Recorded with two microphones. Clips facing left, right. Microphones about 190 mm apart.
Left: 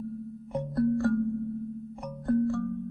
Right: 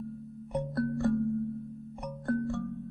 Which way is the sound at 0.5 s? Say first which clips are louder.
Left 4 dB; centre (ahead or behind).